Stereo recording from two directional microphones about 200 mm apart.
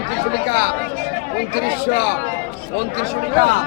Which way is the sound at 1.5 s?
50° left (ahead or behind).